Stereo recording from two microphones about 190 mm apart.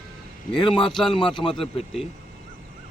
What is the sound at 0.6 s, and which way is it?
Speech, 25° left (ahead or behind).